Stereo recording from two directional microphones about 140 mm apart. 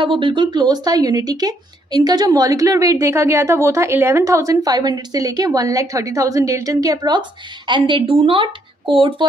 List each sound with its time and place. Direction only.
0.0 s speech: 35° right (ahead or behind)